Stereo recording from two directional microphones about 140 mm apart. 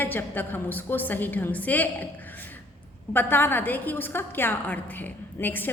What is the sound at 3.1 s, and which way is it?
A woman's voice, 15° left (ahead or behind).